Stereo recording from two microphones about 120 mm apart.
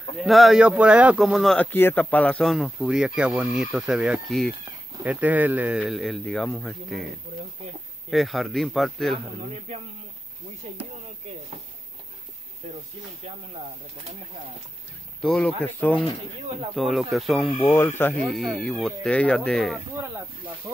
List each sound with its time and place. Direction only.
0.2 s speech: centre (ahead or behind)
1.6 s speech: 15° left (ahead or behind); by 4.6 s centre (ahead or behind)
5.0 s speech: 10° right (ahead or behind)
5.8 s speech: centre (ahead or behind)
8.1 s speech: centre (ahead or behind)
12.6 s speech: 65° right (ahead or behind)
15.2 s speech: 5° left (ahead or behind)
16.7 s speech: centre (ahead or behind)
17.7 s speech: 20° left (ahead or behind)
18.3 s speech: centre (ahead or behind)
20.7 s speech: 25° right (ahead or behind)